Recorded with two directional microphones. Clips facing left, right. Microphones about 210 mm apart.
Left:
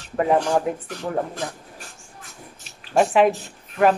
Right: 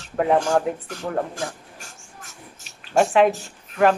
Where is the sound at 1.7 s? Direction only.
45° right (ahead or behind).